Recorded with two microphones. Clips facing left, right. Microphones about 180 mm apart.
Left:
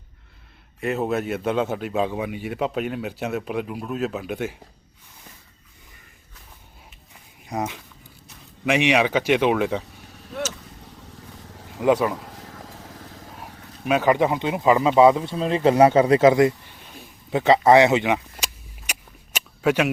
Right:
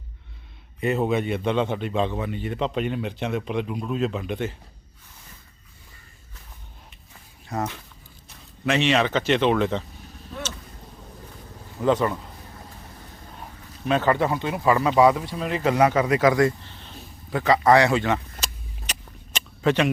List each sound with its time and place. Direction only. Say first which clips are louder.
0.8 s speech: right 1 dB; centre (ahead or behind)
7.4 s speech: left 1 dB; 15° left (ahead or behind)
11.8 s speech: left 2 dB; 10° left (ahead or behind)
12.3 s vehicle: left 3 dB; 90° left
13.4 s speech: right 1 dB; 10° left (ahead or behind)
17.4 s vehicle: left 3 dB; 25° left (ahead or behind)